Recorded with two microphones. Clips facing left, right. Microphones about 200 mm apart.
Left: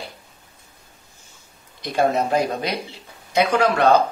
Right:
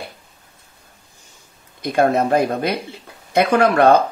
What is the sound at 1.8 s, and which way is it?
Speech, 55° right (ahead or behind).